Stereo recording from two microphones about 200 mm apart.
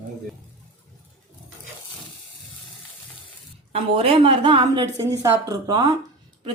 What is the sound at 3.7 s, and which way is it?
A woman's voice, 30° right (ahead or behind).